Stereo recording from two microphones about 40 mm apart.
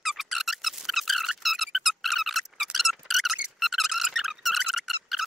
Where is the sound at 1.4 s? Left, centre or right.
Centre.